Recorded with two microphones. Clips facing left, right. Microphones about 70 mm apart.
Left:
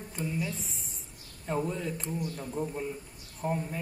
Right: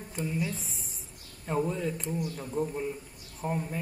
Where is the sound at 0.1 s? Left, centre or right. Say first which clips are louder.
Right 2 dB; centre.